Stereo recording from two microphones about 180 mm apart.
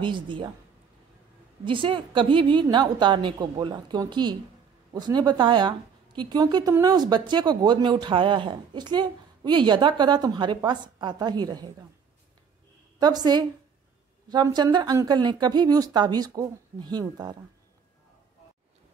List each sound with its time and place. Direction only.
0.0 s a woman's voice: 25° right (ahead or behind)
1.6 s a woman's voice: 30° right (ahead or behind)
13.0 s a woman's voice: 20° right (ahead or behind)